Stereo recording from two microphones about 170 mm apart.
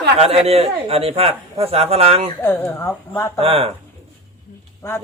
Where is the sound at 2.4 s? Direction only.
10° left (ahead or behind).